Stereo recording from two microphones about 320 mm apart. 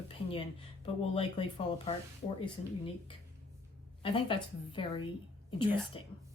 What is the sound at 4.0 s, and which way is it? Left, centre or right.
Speech, centre.